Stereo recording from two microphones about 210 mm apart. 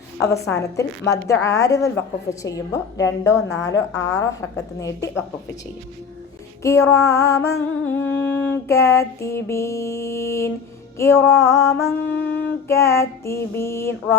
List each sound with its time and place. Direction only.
0.2 s a woman's voice: 15° left (ahead or behind)
6.6 s a woman's voice: 15° left (ahead or behind)